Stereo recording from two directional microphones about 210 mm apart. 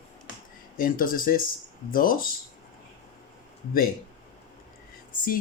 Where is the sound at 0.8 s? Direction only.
40° left (ahead or behind).